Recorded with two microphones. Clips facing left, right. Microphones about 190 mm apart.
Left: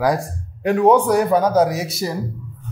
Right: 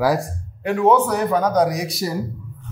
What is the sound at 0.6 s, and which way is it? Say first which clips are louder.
Speech: left 3 dB; 40° left (ahead or behind).